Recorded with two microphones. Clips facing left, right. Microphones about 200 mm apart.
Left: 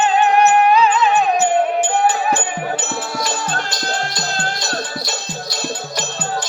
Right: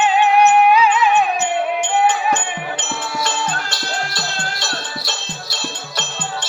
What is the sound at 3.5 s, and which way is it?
Music, 40° left (ahead or behind).